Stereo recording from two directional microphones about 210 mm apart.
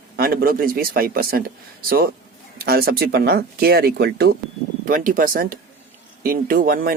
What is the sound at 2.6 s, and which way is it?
Speech, 45° right (ahead or behind).